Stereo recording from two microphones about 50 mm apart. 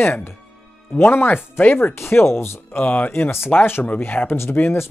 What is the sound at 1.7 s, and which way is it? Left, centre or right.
Speech, left.